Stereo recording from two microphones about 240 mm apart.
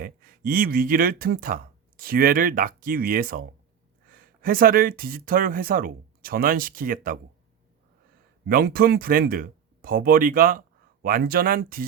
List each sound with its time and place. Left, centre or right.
0.0 s speech: right
8.4 s speech: right